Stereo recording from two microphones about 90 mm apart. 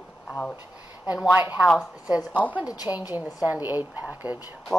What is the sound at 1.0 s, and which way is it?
Speech, 15° right (ahead or behind).